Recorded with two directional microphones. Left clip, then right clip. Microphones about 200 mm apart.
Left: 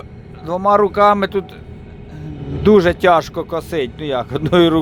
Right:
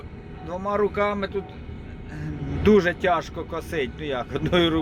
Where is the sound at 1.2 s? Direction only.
45° left (ahead or behind).